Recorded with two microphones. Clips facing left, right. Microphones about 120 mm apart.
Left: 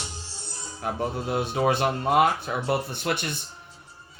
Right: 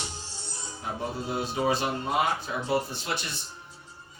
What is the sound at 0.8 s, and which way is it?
Speech, 60° left (ahead or behind).